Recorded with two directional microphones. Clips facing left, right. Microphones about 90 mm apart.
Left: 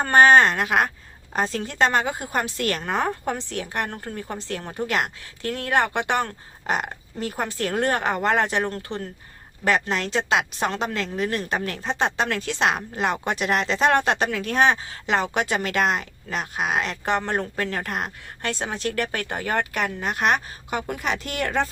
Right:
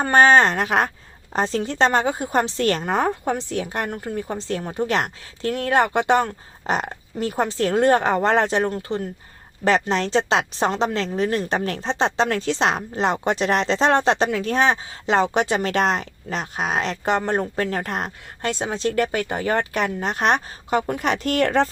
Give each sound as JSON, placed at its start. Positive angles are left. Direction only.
{"t": 0.0, "sound": "a woman's voice", "side_deg": -25}